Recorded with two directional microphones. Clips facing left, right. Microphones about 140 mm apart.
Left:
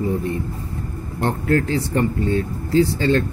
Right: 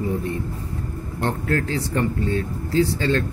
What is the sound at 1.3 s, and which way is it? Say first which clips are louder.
Speech: left 4 dB; 30° left (ahead or behind).